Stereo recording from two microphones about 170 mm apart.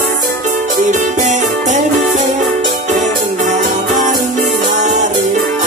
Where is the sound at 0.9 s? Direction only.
45° right (ahead or behind).